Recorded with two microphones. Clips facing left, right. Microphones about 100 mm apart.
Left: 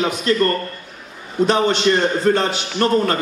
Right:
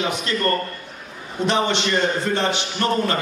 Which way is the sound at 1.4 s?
40° left (ahead or behind).